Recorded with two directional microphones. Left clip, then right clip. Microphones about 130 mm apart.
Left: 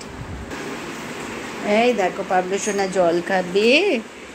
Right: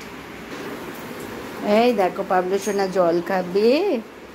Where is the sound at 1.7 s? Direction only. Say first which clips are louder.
Even; 30° right (ahead or behind).